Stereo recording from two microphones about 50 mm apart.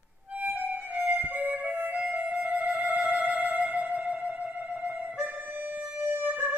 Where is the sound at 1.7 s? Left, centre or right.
Right.